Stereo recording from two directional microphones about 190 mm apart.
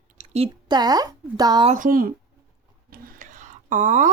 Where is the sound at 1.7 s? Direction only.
45° right (ahead or behind).